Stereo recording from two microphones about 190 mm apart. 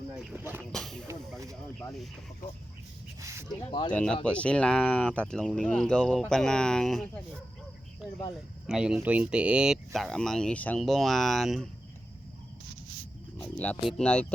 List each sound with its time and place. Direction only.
0.3 s speech: 10° right (ahead or behind)
0.6 s a sound: centre (ahead or behind)
3.2 s speech: 15° right (ahead or behind)
3.7 s speech: 25° left (ahead or behind)
3.9 s speech: 5° left (ahead or behind)
8.6 s speech: 5° right (ahead or behind)
13.6 s speech: 5° left (ahead or behind)